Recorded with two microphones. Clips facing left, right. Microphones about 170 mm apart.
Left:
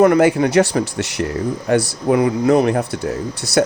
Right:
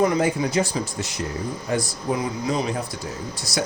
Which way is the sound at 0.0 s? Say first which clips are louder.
Left 8 dB; 70° left (ahead or behind).